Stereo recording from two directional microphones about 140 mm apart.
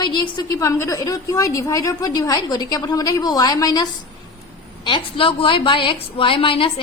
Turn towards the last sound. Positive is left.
turn(degrees=40)  # may be behind; listen again after turning